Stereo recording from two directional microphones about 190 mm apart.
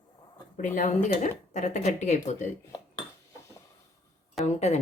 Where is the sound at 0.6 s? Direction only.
40° left (ahead or behind).